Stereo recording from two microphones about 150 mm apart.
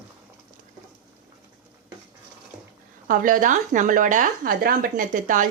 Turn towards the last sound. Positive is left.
turn(degrees=-60)  # may be behind; listen again after turning